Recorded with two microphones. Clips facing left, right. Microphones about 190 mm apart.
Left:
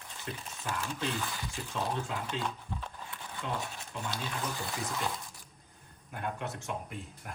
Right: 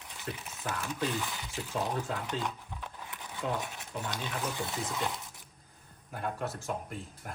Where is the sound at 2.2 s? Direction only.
15° right (ahead or behind).